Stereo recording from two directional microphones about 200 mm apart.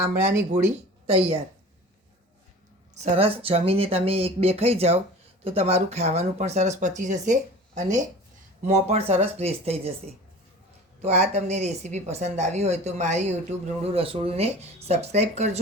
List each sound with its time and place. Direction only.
0.0 s speech: 15° right (ahead or behind)
1.0 s a woman's voice: 30° right (ahead or behind)
2.9 s a woman's voice: 30° right (ahead or behind)
11.0 s a woman's voice: 35° right (ahead or behind)